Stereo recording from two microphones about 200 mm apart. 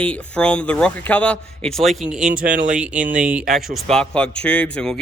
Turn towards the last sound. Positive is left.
turn(degrees=5)  # may be behind; listen again after turning